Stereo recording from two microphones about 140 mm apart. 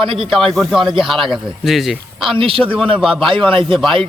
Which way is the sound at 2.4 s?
40° right (ahead or behind).